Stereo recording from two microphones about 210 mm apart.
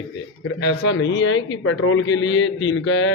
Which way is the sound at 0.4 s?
55° left (ahead or behind).